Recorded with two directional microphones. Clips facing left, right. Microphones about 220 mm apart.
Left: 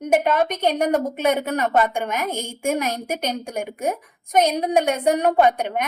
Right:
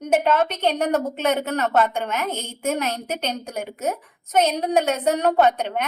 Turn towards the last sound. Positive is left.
turn(degrees=10)  # may be behind; listen again after turning